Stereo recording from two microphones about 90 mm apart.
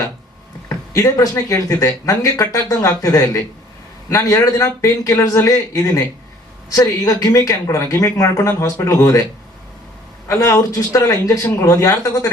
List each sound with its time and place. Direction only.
0.9 s a woman's voice: 40° left (ahead or behind)
10.2 s speech: 35° left (ahead or behind)